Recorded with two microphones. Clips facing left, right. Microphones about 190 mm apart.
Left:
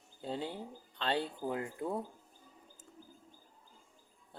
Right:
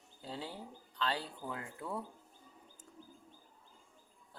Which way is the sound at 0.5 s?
25° left (ahead or behind).